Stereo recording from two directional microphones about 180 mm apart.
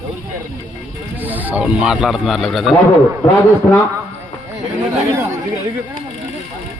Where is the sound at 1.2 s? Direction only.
10° right (ahead or behind); by 3.8 s 10° left (ahead or behind).